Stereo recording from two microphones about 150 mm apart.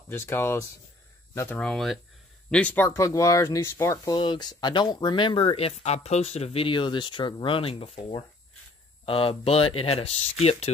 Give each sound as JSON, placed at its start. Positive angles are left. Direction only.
{"t": 0.1, "sound": "speech", "side_deg": 15}